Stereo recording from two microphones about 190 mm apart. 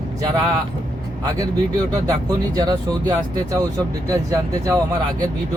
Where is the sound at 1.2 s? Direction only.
20° right (ahead or behind).